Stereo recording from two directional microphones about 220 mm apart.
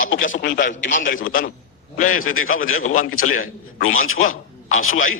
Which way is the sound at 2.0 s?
70° left (ahead or behind).